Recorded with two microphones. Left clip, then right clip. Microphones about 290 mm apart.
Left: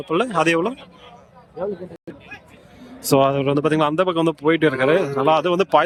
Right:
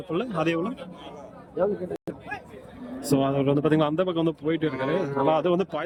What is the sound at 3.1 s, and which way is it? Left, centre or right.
Speech, centre.